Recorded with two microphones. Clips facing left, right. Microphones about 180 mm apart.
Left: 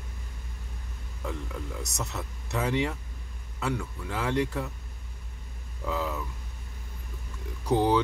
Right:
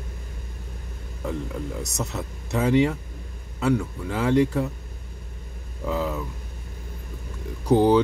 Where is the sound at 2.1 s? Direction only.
25° right (ahead or behind).